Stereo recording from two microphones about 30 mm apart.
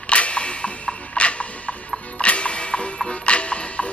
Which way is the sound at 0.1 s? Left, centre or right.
Left.